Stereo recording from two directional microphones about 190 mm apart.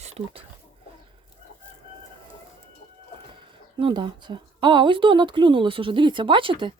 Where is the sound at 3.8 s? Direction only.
25° right (ahead or behind).